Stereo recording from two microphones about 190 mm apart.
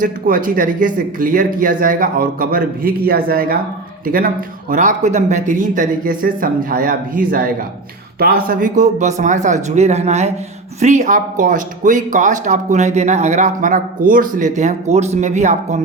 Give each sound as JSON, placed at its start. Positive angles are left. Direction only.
{"t": 0.0, "sound": "speech", "side_deg": -45}